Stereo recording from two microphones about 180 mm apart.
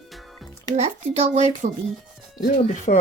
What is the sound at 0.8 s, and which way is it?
Speech, 35° right (ahead or behind).